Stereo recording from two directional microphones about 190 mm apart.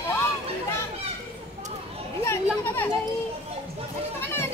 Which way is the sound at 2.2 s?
10° left (ahead or behind).